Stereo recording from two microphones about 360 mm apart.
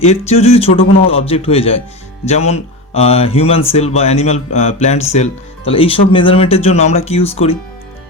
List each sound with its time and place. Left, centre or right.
0.0 s speech: centre